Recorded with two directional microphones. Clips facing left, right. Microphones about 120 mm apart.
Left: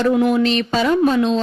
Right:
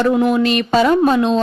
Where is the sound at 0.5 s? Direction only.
55° right (ahead or behind).